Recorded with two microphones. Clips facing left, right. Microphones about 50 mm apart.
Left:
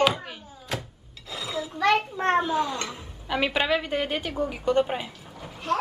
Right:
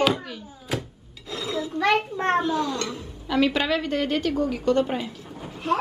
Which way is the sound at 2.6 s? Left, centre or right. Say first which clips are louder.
Right 2 dB; centre.